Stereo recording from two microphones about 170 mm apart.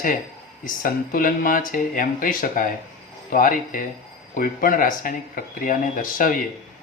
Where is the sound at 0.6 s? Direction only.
55° left (ahead or behind).